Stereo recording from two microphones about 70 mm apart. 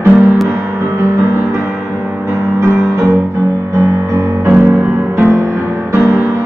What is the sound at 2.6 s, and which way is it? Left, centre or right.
Music, right.